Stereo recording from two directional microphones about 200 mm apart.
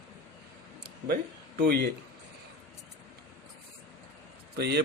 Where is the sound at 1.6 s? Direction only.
50° right (ahead or behind).